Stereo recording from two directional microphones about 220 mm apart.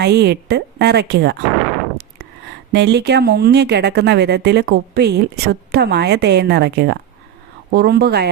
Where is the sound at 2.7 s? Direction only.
50° right (ahead or behind).